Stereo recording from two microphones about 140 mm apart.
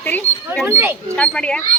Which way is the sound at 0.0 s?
10° left (ahead or behind).